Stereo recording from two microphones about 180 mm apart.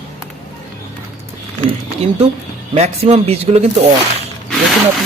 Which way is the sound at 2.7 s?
35° right (ahead or behind).